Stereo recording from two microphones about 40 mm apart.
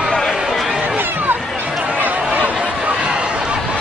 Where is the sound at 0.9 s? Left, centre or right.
Right.